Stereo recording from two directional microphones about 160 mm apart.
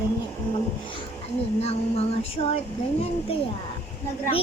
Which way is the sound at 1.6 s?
40° left (ahead or behind).